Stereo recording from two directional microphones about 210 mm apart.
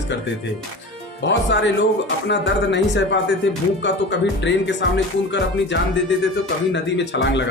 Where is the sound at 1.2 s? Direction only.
60° left (ahead or behind).